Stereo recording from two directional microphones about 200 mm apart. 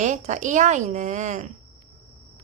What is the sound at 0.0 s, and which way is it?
Speech, 35° right (ahead or behind).